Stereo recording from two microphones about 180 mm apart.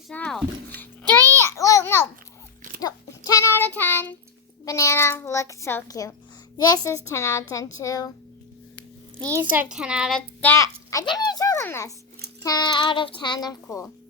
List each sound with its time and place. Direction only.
0.1 s music: 5° left (ahead or behind)
1.4 s a sound: 15° left (ahead or behind)
2.8 s child singing: 20° left (ahead or behind)
4.6 s a sound: 20° left (ahead or behind)
6.6 s a child's voice: 20° left (ahead or behind)
9.3 s a child's voice: 10° right (ahead or behind); by 13.9 s 15° left (ahead or behind)